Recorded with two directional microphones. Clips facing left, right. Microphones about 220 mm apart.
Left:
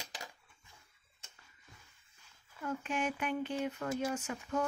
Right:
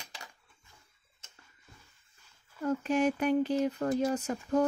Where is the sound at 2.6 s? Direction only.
40° right (ahead or behind).